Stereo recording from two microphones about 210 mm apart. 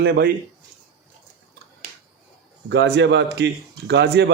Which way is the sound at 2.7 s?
55° right (ahead or behind).